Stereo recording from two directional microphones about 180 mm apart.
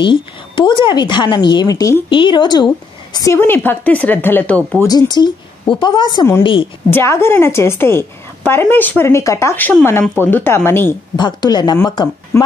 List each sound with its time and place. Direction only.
0.0 s a woman's voice: 25° left (ahead or behind); by 4.6 s 10° left (ahead or behind)
4.7 s a woman's voice: 20° left (ahead or behind)
6.4 s a woman's voice: 30° left (ahead or behind)
6.9 s speech: 15° left (ahead or behind)
11.1 s a woman's voice: 25° left (ahead or behind)